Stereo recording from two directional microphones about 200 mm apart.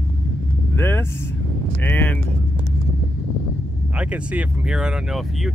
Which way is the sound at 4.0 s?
5° right (ahead or behind).